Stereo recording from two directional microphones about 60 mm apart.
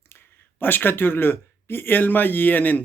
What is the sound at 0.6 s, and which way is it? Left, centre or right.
Speech, left.